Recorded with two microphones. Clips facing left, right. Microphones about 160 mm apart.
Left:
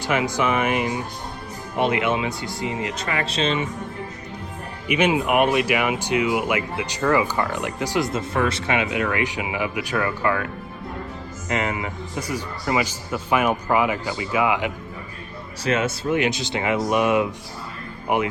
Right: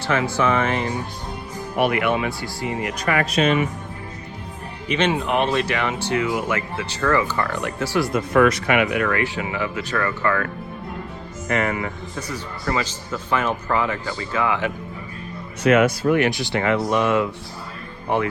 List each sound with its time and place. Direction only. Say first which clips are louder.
0.0 s speech: right 1 dB; 15° left (ahead or behind)
4.9 s speech: left 1 dB; 10° left (ahead or behind)
15.6 s speech: right 6 dB; 25° left (ahead or behind)